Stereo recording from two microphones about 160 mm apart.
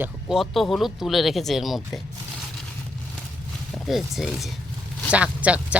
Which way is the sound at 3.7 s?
Centre (ahead or behind).